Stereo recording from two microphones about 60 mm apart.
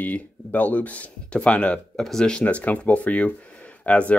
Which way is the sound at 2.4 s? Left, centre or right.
Left.